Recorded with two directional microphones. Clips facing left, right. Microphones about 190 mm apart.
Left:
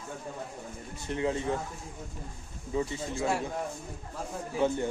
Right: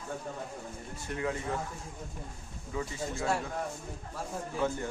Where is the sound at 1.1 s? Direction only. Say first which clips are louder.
Left 4 dB; 25° left (ahead or behind).